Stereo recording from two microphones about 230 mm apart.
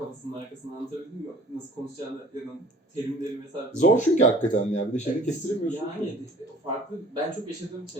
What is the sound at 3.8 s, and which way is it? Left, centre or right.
Speech, left.